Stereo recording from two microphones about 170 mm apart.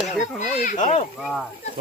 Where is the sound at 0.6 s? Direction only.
45° left (ahead or behind).